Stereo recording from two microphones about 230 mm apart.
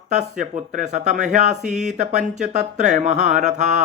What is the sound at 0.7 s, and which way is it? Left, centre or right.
Mantra, right.